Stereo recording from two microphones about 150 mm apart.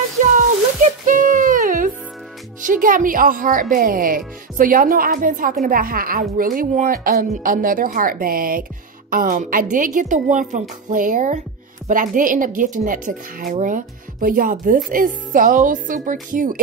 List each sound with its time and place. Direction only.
0.2 s a sound: 55° right (ahead or behind)
1.0 s music: 60° right (ahead or behind)
2.6 s a woman's voice: 65° right (ahead or behind)